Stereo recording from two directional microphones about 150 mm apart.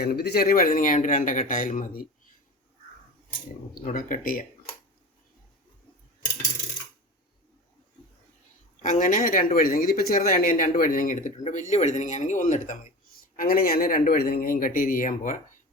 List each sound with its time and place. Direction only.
0.0 s speech: 90° left; by 2.0 s 65° left (ahead or behind)
3.8 s speech: 65° left (ahead or behind)
8.8 s speech: 60° left (ahead or behind)
13.3 s speech: 70° left (ahead or behind)